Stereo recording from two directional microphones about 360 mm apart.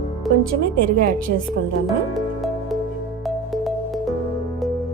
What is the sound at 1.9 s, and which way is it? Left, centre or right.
Music, centre.